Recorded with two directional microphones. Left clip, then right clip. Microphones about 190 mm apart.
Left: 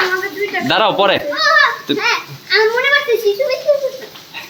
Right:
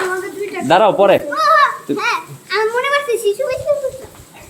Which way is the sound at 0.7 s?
20° right (ahead or behind).